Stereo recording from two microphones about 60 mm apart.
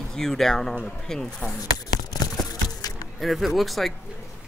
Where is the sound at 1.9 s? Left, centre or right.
Left.